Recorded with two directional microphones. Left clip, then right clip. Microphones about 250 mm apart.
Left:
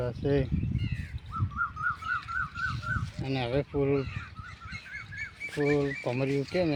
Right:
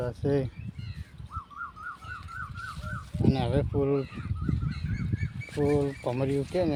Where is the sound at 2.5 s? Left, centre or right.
Right.